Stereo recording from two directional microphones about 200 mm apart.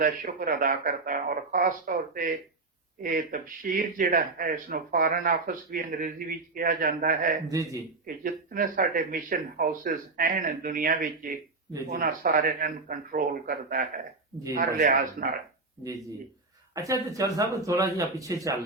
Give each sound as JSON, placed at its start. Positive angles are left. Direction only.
{"t": 0.0, "sound": "speech", "side_deg": -45}
{"t": 7.4, "sound": "speech", "side_deg": -15}
{"t": 8.0, "sound": "a man's voice", "side_deg": -45}
{"t": 15.8, "sound": "speech", "side_deg": -15}